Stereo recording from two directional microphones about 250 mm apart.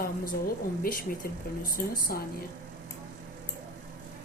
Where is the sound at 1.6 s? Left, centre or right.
Left.